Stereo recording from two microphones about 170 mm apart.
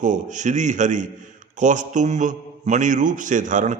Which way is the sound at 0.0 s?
45° right (ahead or behind).